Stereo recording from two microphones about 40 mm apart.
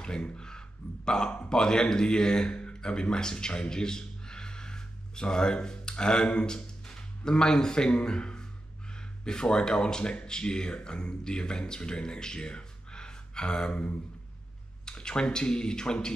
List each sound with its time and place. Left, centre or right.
0.0 s a man's voice: left
14.9 s speech: centre